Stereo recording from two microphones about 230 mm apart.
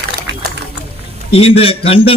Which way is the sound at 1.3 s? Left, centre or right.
Left.